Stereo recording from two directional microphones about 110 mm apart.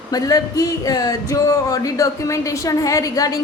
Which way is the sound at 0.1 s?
35° left (ahead or behind).